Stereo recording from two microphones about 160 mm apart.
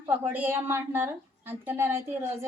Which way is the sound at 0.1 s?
15° right (ahead or behind).